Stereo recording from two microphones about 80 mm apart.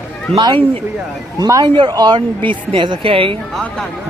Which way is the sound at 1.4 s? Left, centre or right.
Right.